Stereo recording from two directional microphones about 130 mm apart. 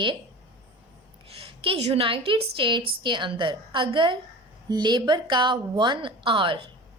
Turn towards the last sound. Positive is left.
turn(degrees=-40)  # may be behind; listen again after turning